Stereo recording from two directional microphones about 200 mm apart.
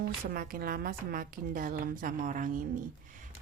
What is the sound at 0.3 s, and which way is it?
A woman's voice, 45° right (ahead or behind).